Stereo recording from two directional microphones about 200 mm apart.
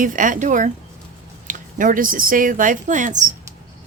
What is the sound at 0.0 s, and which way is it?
A woman's voice, 40° right (ahead or behind).